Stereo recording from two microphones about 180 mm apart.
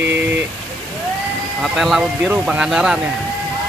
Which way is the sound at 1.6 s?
Centre (ahead or behind).